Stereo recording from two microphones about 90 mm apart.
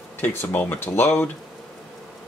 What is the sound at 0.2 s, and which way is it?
Speech, 25° left (ahead or behind).